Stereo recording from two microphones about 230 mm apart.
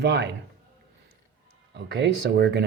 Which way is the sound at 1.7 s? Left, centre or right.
Right.